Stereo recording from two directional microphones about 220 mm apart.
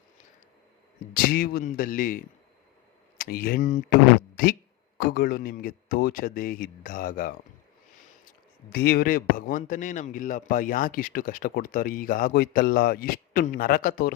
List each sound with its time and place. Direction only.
1.1 s a man's voice: 45° left (ahead or behind)
4.9 s a man's voice: 40° left (ahead or behind)
8.7 s a man's voice: 45° left (ahead or behind)